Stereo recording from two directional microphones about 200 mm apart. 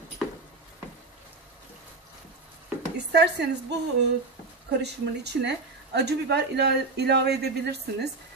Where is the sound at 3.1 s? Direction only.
55° right (ahead or behind).